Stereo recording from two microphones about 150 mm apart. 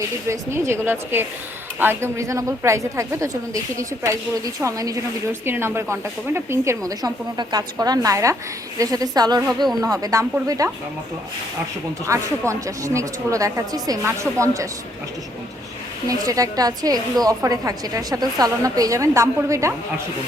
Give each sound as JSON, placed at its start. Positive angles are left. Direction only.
{"t": 0.3, "sound": "a woman's voice", "side_deg": -20}
{"t": 12.0, "sound": "a woman's voice", "side_deg": -20}
{"t": 16.0, "sound": "a woman's voice", "side_deg": -25}